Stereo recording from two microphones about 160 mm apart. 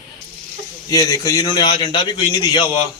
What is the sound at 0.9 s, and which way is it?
A man's voice, 20° left (ahead or behind).